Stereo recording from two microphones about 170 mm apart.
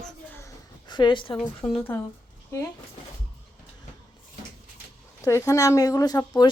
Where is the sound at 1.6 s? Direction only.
20° left (ahead or behind).